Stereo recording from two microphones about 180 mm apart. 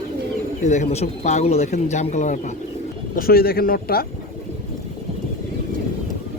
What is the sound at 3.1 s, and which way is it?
Speech, 55° left (ahead or behind).